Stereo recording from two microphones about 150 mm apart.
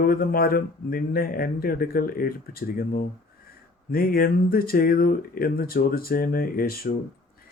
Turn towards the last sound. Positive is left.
turn(degrees=80)